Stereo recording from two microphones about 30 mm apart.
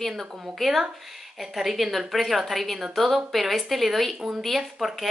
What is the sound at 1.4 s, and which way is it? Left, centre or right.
Speech, centre.